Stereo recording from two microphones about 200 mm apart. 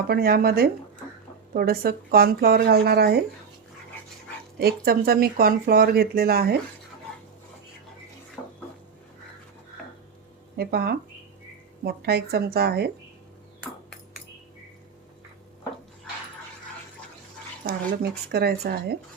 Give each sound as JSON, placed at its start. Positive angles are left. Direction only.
{"t": 0.1, "sound": "speech", "side_deg": -50}
{"t": 4.6, "sound": "speech", "side_deg": -50}
{"t": 10.6, "sound": "speech", "side_deg": -50}
{"t": 17.7, "sound": "speech", "side_deg": -50}